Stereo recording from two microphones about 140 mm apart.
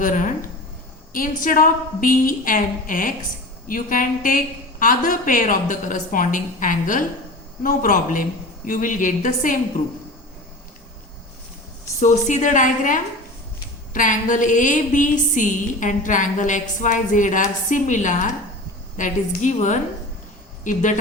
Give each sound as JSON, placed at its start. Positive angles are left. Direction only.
{"t": 0.0, "sound": "a woman's voice", "side_deg": 70}
{"t": 1.1, "sound": "a woman's voice", "side_deg": 80}
{"t": 7.6, "sound": "a woman's voice", "side_deg": 80}
{"t": 11.9, "sound": "a woman's voice", "side_deg": 60}